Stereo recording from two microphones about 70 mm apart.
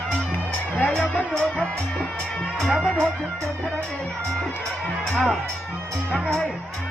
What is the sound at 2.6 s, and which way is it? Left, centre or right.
Speech, centre.